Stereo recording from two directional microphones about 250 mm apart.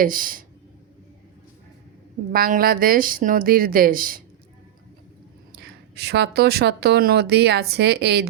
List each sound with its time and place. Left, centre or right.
0.0 s speech: right
2.3 s speech: right
5.5 s speech: right